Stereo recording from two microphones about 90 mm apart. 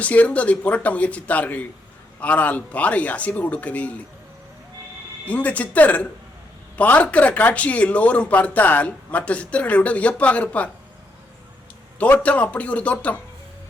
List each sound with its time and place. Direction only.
0.0 s speech: 15° left (ahead or behind)
5.2 s speech: 15° left (ahead or behind)
11.9 s speech: 20° left (ahead or behind)